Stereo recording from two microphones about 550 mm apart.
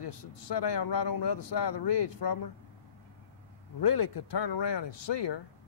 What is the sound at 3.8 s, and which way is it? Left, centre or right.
A man's voice, left.